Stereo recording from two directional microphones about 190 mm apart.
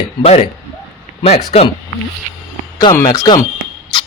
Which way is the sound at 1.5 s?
30° left (ahead or behind).